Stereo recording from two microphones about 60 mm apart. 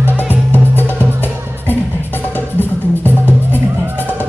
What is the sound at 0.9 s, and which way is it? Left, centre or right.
Music, right.